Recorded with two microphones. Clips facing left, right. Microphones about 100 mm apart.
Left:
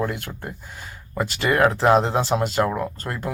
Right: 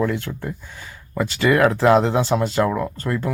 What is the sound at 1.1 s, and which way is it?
Speech, 35° left (ahead or behind).